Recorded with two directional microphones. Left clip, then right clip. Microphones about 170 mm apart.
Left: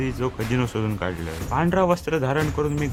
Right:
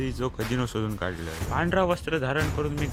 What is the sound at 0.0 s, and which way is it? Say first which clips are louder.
Speech: left 4 dB; 35° right (ahead or behind).